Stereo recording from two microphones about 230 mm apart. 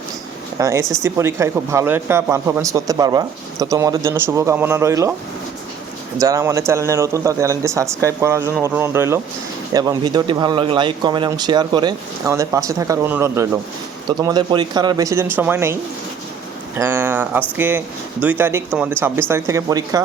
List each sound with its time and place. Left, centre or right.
0.6 s speech: centre
6.1 s speech: centre